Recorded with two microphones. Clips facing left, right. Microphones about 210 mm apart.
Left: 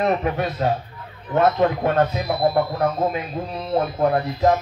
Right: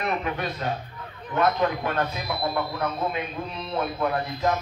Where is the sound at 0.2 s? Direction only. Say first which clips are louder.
Left 7 dB; 30° left (ahead or behind).